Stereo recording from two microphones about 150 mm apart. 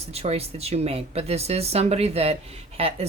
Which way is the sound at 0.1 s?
45° right (ahead or behind).